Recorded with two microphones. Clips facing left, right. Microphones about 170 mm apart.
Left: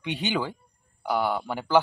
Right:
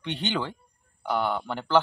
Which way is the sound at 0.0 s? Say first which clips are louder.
Left 1 dB; 10° left (ahead or behind).